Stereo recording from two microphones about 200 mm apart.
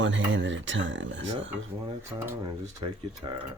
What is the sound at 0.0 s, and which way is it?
Speech, 70° right (ahead or behind).